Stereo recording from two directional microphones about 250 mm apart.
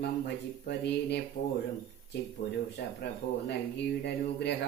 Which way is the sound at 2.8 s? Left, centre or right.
Left.